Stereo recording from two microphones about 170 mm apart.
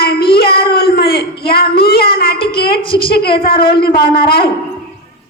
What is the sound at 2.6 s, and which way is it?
Speech, 30° left (ahead or behind).